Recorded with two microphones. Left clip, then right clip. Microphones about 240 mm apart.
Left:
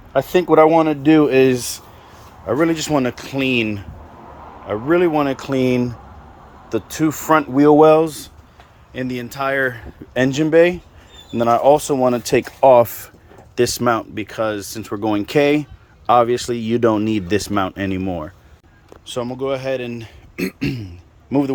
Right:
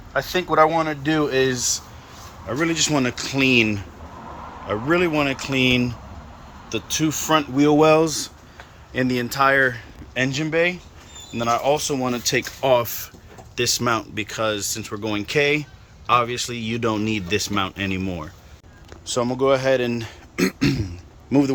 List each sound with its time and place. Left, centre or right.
0.1 s speech: left
2.5 s a man's voice: centre
6.7 s speech: left
10.2 s speech: left; by 21.5 s centre